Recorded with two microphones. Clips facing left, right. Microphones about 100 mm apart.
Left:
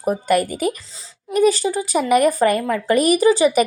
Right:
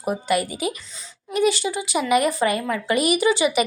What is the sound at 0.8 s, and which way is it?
Speech, 30° left (ahead or behind).